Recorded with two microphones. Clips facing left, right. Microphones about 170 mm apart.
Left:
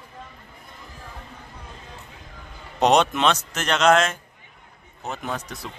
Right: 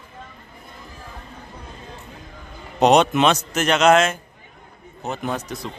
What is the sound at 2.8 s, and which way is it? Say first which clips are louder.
Speech: right 3 dB; 5° right (ahead or behind).